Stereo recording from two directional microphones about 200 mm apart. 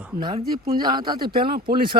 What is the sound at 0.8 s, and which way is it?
Speech, 20° right (ahead or behind).